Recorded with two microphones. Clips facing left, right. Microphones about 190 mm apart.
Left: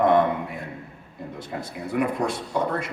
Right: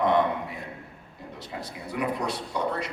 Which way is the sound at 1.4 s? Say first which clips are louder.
Left 4 dB; 50° left (ahead or behind).